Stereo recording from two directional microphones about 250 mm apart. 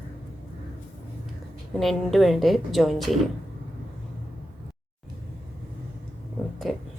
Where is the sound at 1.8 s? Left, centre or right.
Centre.